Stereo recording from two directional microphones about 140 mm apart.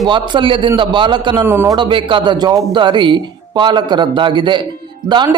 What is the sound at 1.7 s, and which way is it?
A man's voice, 35° right (ahead or behind).